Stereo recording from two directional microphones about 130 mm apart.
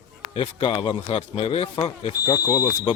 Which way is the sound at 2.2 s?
25° left (ahead or behind).